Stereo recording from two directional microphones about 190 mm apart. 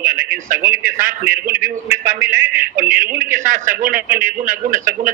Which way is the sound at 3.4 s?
45° right (ahead or behind).